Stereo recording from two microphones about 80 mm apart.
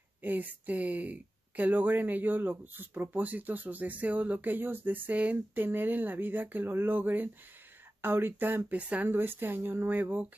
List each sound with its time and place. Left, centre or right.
0.2 s speech: right